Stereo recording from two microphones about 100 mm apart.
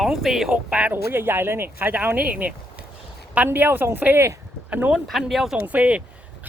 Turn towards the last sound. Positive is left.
turn(degrees=-10)  # may be behind; listen again after turning